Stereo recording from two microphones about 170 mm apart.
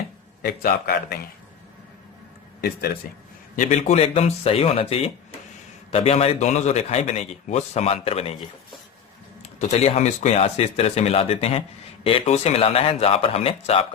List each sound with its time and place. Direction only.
0.4 s a man's voice: 60° left (ahead or behind)
2.6 s a man's voice: 65° left (ahead or behind)
3.5 s a man's voice: 45° left (ahead or behind)
9.4 s a man's voice: 40° left (ahead or behind)